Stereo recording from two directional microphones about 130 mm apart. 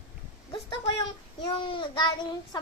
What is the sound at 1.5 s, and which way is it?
Child singing, 40° left (ahead or behind).